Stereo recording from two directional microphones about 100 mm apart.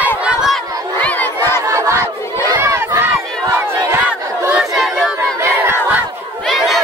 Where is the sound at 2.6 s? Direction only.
25° right (ahead or behind).